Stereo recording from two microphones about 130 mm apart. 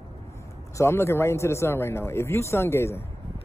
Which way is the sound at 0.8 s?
20° left (ahead or behind).